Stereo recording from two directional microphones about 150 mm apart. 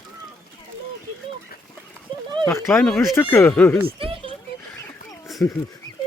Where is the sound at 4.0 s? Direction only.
35° right (ahead or behind).